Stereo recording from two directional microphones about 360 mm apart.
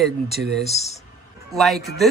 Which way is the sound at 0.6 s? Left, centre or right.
Centre.